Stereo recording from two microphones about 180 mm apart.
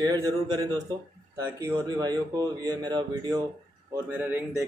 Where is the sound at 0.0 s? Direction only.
20° right (ahead or behind).